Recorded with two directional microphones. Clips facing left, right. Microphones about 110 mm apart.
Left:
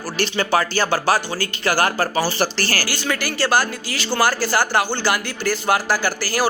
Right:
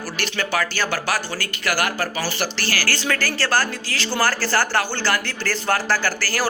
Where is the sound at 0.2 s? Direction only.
30° left (ahead or behind).